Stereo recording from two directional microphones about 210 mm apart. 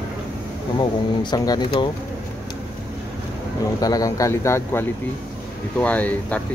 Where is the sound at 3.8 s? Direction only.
15° left (ahead or behind).